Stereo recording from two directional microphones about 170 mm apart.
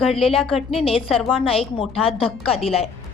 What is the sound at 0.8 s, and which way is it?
Speech, 35° left (ahead or behind).